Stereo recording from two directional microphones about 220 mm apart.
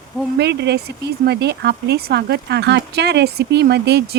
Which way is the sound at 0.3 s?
50° right (ahead or behind).